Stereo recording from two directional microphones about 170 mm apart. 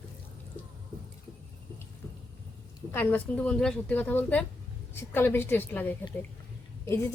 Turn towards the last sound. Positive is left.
turn(degrees=15)  # may be behind; listen again after turning